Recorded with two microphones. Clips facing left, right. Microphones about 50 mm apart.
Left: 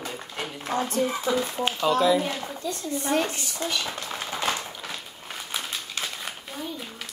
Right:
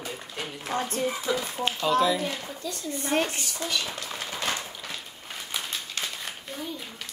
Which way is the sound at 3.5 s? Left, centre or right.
Left.